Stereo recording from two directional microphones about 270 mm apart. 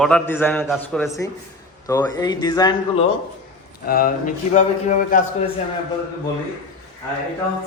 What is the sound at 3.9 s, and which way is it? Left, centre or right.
Speech, left.